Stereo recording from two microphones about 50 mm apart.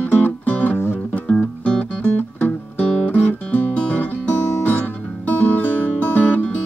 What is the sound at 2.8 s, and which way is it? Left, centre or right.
Music, centre.